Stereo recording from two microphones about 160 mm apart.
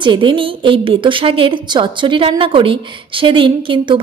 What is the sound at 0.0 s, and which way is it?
A woman's voice, 30° right (ahead or behind).